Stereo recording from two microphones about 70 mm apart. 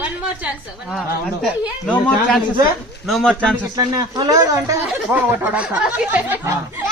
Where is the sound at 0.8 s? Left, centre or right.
Centre.